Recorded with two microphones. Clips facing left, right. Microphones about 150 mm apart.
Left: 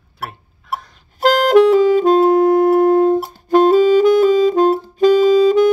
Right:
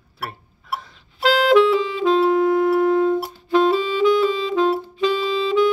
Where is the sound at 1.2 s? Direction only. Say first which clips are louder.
Left 4 dB; 45° left (ahead or behind).